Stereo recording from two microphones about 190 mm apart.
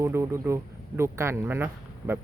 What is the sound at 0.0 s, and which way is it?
Speech, 15° right (ahead or behind).